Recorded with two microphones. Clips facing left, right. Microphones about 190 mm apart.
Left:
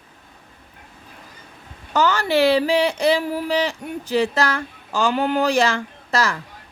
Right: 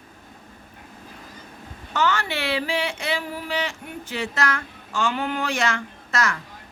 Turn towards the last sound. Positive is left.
turn(degrees=35)  # may be behind; listen again after turning